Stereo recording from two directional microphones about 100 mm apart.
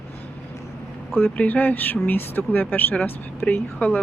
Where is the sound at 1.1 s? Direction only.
15° left (ahead or behind).